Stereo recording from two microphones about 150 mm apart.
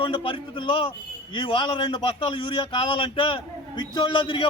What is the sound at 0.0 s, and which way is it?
A man's voice, 35° left (ahead or behind).